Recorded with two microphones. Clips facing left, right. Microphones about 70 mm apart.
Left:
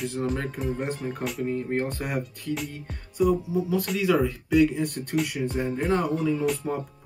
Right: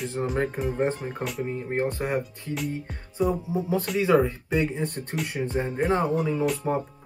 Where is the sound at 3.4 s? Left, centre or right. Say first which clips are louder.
Left 1 dB; right.